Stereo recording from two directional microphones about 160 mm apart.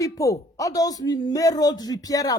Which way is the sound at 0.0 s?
20° left (ahead or behind).